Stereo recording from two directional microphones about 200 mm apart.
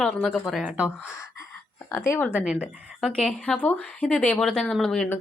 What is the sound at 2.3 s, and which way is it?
Speech, 5° right (ahead or behind).